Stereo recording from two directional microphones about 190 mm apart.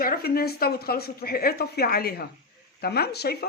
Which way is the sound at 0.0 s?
50° left (ahead or behind).